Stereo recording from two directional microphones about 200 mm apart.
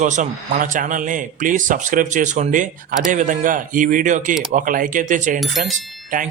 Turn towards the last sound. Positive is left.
turn(degrees=-40)  # may be behind; listen again after turning